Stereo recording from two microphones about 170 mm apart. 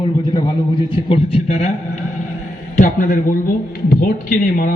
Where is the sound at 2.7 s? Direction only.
50° left (ahead or behind).